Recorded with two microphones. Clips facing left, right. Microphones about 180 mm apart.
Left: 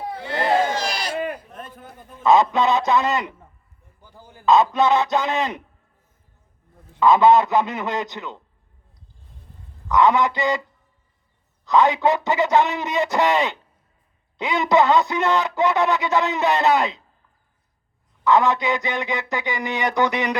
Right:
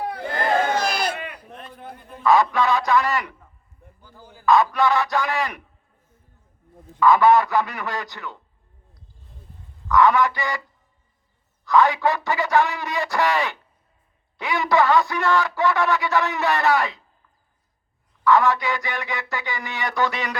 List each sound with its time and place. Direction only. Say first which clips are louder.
0.4 s crowd: left 1 dB; 55° right (ahead or behind)
1.1 s a sound: left 8 dB; 45° left (ahead or behind)
2.2 s a man's voice: left 2 dB; 20° left (ahead or behind)
7.0 s speech: left 1 dB; 20° left (ahead or behind)
9.9 s speech: even; 20° left (ahead or behind)
11.6 s speech: left 1 dB; 20° left (ahead or behind)
18.3 s speech: left 1 dB; 20° left (ahead or behind)